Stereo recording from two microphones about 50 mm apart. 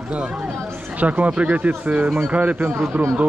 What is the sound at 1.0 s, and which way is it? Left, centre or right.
A man's voice, right.